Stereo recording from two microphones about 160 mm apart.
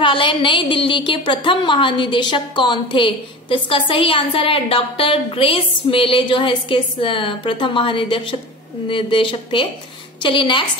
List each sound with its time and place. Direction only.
0.0 s a woman's voice: 30° left (ahead or behind)